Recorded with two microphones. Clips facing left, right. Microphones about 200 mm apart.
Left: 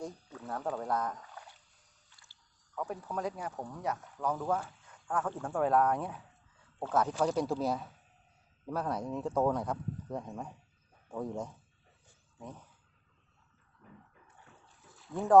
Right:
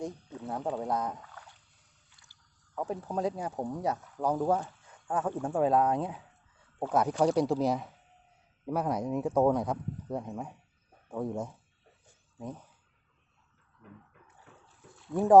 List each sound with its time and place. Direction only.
0.0 s speech: 20° right (ahead or behind)
4.6 s speech: 25° right (ahead or behind); by 11.5 s 5° right (ahead or behind)
14.9 s a sound: centre (ahead or behind)